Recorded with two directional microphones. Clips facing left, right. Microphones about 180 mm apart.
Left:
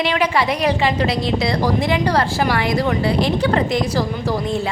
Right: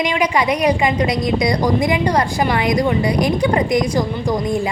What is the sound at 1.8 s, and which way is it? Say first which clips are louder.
A woman's voice: right 1 dB; 15° right (ahead or behind).